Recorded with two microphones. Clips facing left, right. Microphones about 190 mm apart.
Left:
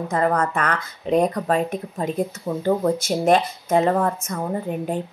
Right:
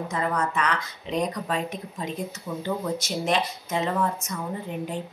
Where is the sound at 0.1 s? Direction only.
55° left (ahead or behind).